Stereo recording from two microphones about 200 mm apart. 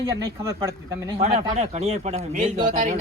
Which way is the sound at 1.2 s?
30° right (ahead or behind).